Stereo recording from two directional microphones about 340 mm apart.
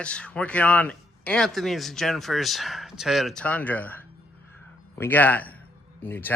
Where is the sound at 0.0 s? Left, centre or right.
Centre.